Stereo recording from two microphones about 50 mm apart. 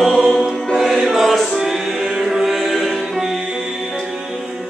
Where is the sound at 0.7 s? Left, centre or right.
Centre.